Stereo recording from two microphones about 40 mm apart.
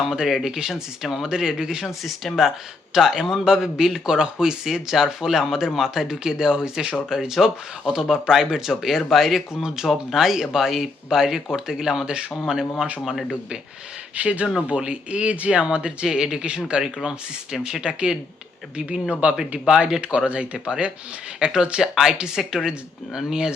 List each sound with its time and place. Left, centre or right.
0.0 s speech: centre
1.3 s speech: centre
2.0 s speech: centre
12.0 s speech: right
14.2 s speech: right
16.0 s speech: centre